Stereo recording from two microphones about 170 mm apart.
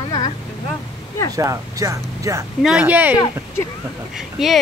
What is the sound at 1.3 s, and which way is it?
Speech, 20° right (ahead or behind).